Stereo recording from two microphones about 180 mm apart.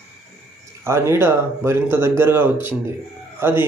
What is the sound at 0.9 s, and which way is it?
Speech, 15° right (ahead or behind).